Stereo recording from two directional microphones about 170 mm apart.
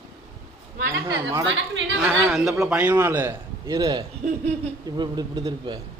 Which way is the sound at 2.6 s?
5° right (ahead or behind).